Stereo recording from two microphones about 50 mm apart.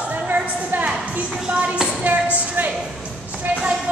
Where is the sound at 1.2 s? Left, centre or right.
Centre.